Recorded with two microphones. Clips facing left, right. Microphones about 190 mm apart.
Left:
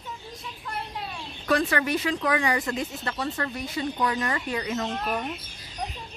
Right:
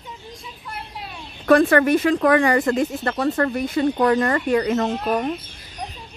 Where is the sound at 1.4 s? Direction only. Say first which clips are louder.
Right 10 dB; 50° right (ahead or behind).